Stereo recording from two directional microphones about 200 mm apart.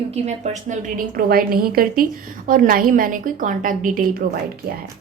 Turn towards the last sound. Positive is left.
turn(degrees=-45)  # may be behind; listen again after turning